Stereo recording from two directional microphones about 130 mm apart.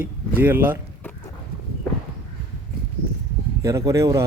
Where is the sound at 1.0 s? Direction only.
15° left (ahead or behind).